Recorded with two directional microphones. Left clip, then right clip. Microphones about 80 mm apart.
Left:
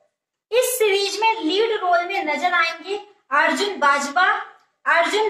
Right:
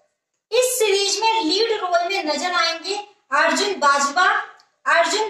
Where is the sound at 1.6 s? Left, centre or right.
Right.